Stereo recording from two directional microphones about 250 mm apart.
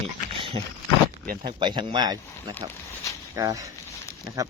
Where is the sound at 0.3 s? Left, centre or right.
Right.